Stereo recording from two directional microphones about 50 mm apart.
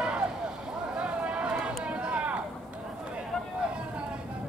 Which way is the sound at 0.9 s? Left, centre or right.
Centre.